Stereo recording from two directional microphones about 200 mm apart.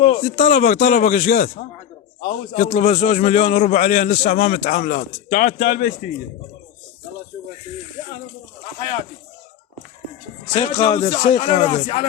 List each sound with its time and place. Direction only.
0.0 s a man's voice: 30° left (ahead or behind)
10.5 s a man's voice: 20° left (ahead or behind)